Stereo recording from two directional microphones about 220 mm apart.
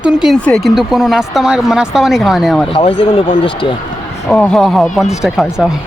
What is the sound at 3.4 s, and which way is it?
Speech, 20° left (ahead or behind).